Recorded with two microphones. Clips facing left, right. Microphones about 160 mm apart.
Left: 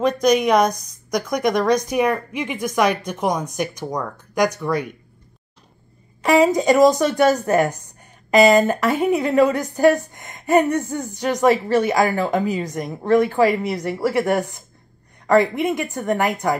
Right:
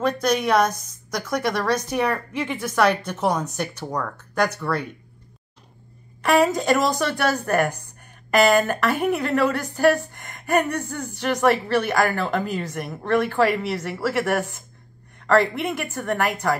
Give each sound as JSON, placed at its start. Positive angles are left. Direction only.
{"t": 0.0, "sound": "a woman's voice", "side_deg": 15}
{"t": 6.2, "sound": "a woman's voice", "side_deg": 20}